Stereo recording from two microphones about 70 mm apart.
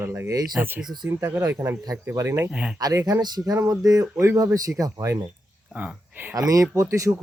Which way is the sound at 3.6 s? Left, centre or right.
Right.